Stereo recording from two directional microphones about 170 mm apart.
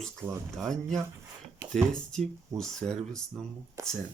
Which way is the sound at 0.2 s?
15° right (ahead or behind).